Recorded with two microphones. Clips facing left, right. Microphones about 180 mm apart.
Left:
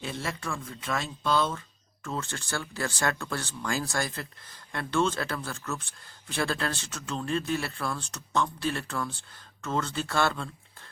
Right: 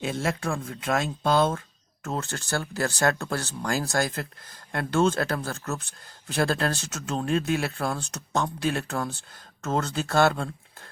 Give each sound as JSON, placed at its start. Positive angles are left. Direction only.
{"t": 0.1, "sound": "speech", "side_deg": -50}
{"t": 7.4, "sound": "speech", "side_deg": -55}